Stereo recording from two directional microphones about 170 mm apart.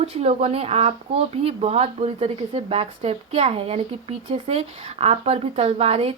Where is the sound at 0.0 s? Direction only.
40° right (ahead or behind).